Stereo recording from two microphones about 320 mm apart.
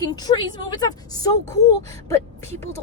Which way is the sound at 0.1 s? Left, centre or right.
Centre.